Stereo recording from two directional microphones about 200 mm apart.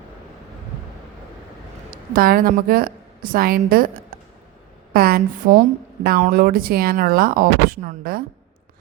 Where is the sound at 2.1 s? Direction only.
45° right (ahead or behind).